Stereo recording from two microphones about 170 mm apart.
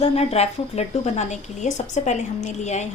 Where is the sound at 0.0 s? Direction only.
35° left (ahead or behind).